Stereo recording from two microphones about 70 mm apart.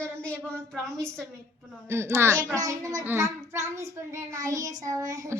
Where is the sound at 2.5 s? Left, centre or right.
Right.